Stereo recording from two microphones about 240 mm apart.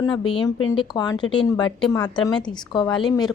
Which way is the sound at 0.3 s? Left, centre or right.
Left.